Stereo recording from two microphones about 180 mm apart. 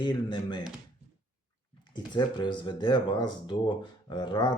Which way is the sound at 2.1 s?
25° left (ahead or behind).